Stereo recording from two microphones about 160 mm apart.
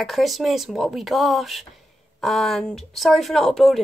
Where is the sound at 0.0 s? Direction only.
Centre (ahead or behind).